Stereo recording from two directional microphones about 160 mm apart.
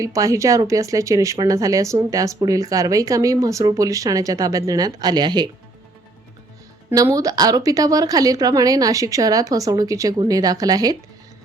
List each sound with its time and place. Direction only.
0.0 s speech: 20° right (ahead or behind)
6.9 s speech: 20° right (ahead or behind)